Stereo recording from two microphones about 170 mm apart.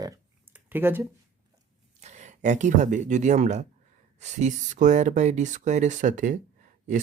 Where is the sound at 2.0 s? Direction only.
45° right (ahead or behind).